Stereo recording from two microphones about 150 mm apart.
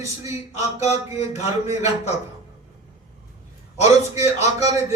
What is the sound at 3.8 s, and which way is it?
A man's voice, 45° left (ahead or behind).